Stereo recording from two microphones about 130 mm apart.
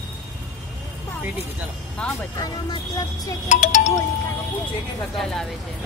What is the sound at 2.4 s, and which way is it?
Speech, 30° left (ahead or behind).